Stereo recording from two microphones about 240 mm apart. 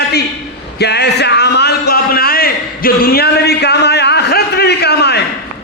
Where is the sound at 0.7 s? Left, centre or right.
Left.